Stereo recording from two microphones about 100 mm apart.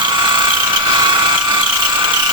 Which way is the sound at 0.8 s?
50° right (ahead or behind).